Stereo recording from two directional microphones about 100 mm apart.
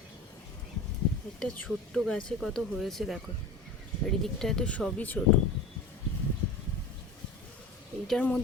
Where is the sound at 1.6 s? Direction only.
5° left (ahead or behind).